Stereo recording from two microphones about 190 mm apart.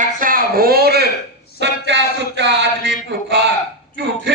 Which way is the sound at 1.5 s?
65° right (ahead or behind).